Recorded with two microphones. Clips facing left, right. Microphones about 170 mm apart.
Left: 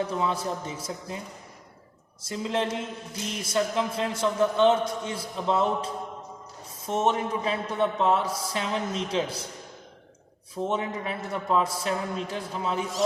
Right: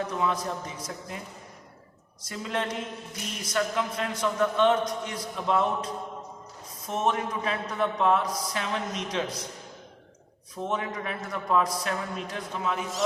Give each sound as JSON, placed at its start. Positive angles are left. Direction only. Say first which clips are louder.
{"t": 0.1, "sound": "speech", "louder": "left 1 dB", "side_deg": 30}
{"t": 2.2, "sound": "speech", "louder": "left 3 dB", "side_deg": 25}
{"t": 10.5, "sound": "speech", "louder": "left 2 dB", "side_deg": 25}